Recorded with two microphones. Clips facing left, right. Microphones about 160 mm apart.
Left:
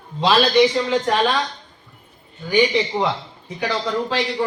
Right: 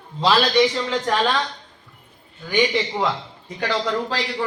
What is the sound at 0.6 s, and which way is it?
Speech, 10° left (ahead or behind).